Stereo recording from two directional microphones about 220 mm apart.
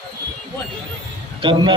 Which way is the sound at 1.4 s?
20° right (ahead or behind).